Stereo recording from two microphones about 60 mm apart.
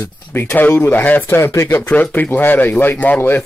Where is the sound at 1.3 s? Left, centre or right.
Left.